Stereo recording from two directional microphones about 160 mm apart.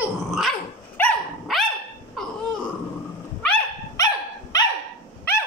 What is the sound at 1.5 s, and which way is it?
Dog, centre (ahead or behind).